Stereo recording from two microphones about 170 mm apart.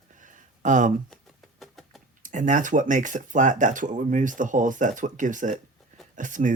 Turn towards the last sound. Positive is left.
turn(degrees=-50)  # may be behind; listen again after turning